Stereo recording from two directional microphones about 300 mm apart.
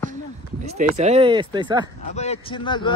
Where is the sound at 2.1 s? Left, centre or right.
Left.